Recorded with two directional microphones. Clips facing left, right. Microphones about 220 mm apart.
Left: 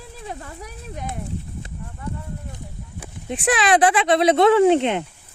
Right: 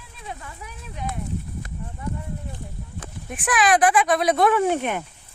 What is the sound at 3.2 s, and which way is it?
Speech, 25° left (ahead or behind).